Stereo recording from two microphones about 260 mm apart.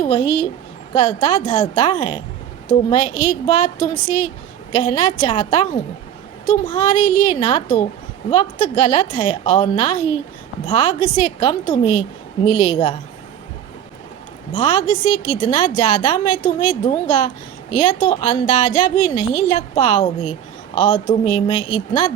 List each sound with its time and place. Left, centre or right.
0.0 s a woman's voice: centre
14.5 s a woman's voice: left